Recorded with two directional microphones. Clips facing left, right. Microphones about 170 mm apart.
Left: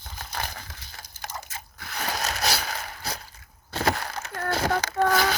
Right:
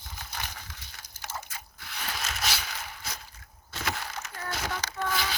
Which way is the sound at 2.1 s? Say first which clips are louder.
Left 6 dB; 40° left (ahead or behind).